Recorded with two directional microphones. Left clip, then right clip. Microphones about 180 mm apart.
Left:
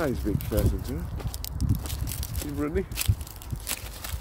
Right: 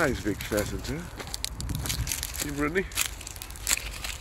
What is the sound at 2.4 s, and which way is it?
Speech, 5° left (ahead or behind).